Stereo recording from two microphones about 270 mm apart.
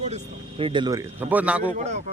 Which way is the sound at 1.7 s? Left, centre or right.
Right.